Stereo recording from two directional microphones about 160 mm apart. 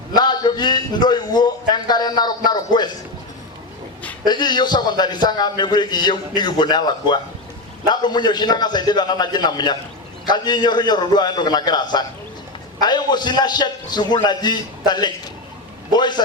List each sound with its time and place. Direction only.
0.1 s a man's voice: 25° left (ahead or behind)
4.3 s a man's voice: 25° left (ahead or behind)